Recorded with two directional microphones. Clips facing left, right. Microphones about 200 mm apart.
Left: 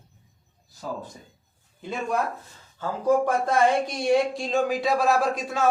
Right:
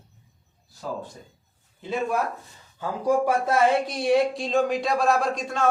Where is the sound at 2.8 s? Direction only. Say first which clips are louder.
Left 1 dB; 10° right (ahead or behind).